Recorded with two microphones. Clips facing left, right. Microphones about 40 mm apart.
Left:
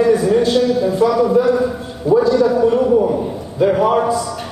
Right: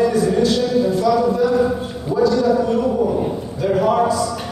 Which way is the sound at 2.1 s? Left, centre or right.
Left.